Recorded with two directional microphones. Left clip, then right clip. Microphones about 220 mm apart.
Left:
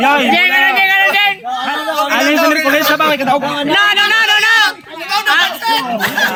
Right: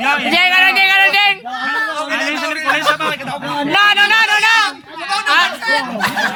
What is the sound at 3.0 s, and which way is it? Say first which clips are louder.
Speech: left 8 dB; 25° left (ahead or behind).